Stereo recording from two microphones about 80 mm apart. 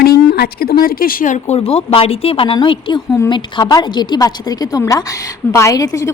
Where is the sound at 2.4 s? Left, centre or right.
Left.